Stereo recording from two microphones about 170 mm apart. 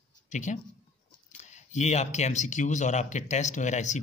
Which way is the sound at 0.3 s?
45° left (ahead or behind).